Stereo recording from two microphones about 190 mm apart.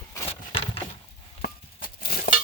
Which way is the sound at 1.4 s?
55° left (ahead or behind).